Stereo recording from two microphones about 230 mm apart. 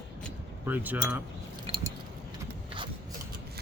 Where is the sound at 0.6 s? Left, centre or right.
Centre.